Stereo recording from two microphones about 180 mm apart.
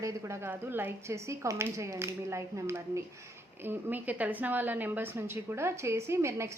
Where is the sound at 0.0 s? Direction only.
15° right (ahead or behind).